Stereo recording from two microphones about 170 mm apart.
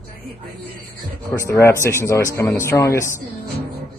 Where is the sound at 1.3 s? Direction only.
15° left (ahead or behind).